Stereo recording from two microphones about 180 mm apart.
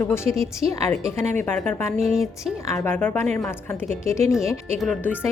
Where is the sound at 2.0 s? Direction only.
Centre (ahead or behind).